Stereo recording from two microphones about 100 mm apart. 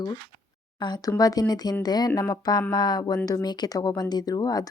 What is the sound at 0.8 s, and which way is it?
Speech, 45° left (ahead or behind).